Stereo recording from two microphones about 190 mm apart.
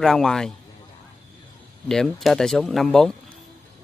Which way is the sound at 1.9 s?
Centre (ahead or behind).